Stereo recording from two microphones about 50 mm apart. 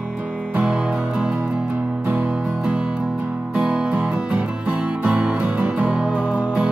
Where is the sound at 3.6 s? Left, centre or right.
Right.